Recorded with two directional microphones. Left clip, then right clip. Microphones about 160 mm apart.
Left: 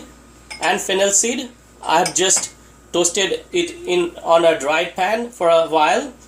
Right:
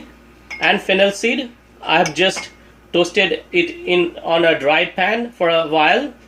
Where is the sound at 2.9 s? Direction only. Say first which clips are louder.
Right 3 dB; 35° right (ahead or behind).